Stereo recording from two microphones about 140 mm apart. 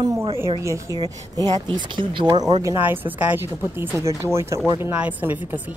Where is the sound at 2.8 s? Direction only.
15° right (ahead or behind).